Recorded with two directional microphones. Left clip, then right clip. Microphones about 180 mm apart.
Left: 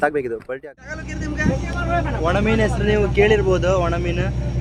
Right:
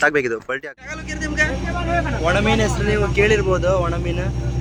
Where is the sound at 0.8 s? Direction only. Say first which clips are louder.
Right 1 dB; 45° left (ahead or behind).